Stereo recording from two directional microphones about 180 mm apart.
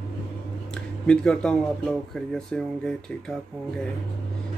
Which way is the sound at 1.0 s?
5° left (ahead or behind).